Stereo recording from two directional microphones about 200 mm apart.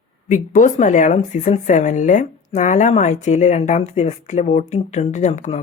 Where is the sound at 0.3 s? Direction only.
40° left (ahead or behind).